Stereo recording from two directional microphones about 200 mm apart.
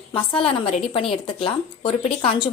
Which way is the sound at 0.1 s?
25° left (ahead or behind).